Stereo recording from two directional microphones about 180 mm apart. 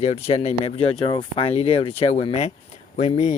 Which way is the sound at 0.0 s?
35° left (ahead or behind).